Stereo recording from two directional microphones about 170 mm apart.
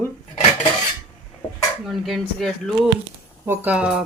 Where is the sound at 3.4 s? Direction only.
10° right (ahead or behind).